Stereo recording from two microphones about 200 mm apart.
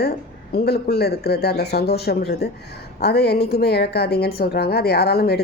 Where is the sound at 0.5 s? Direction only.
55° left (ahead or behind).